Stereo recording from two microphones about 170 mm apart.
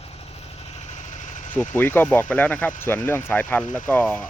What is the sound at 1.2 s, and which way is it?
Engine, 50° left (ahead or behind).